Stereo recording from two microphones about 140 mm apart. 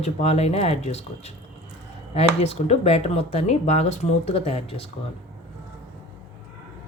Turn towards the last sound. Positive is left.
turn(degrees=45)  # may be behind; listen again after turning